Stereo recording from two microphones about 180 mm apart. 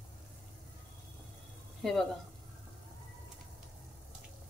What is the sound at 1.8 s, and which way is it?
Speech, centre (ahead or behind).